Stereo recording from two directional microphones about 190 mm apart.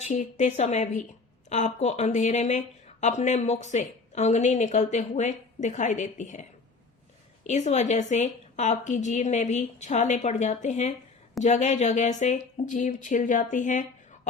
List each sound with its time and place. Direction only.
0.0 s a woman's voice: 40° left (ahead or behind)
7.4 s a woman's voice: 35° left (ahead or behind)